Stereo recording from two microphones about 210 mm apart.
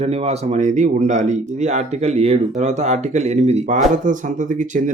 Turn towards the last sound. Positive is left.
turn(degrees=-35)  # may be behind; listen again after turning